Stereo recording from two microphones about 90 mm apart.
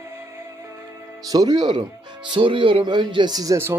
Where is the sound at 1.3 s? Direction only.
45° right (ahead or behind).